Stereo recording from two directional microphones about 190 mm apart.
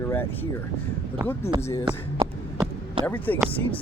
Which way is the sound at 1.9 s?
20° right (ahead or behind).